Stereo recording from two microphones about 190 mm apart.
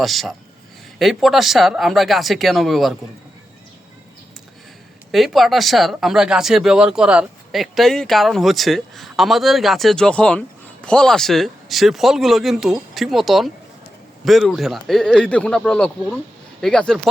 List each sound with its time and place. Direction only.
0.0 s speech: centre (ahead or behind)
5.1 s speech: centre (ahead or behind)